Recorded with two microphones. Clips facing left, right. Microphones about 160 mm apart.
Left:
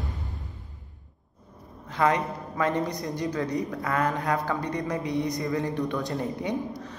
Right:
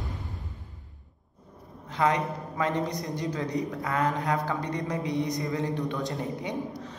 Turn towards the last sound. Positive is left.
turn(degrees=-20)  # may be behind; listen again after turning